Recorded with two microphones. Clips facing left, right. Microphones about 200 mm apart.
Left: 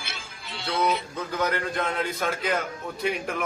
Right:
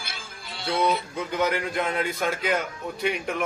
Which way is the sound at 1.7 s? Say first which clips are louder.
Right 1 dB; centre (ahead or behind).